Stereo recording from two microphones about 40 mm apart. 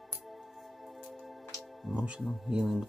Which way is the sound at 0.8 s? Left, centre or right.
Centre.